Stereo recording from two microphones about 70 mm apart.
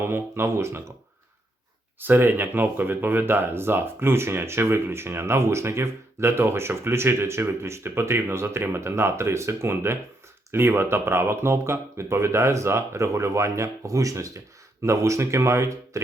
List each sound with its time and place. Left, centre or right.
0.0 s speech: right
2.0 s speech: right